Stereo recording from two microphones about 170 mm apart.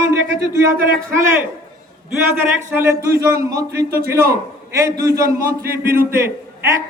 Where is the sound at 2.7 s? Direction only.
15° right (ahead or behind).